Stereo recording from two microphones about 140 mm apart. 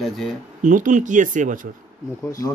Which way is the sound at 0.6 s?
70° right (ahead or behind).